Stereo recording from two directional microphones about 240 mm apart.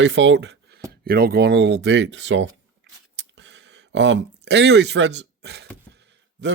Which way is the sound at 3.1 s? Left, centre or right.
Right.